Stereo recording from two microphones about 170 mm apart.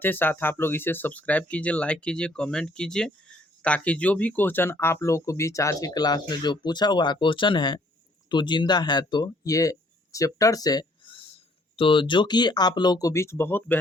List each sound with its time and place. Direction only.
0.0 s speech: 10° left (ahead or behind)